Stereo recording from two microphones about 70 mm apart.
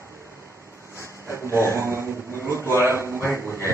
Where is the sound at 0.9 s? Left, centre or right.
Right.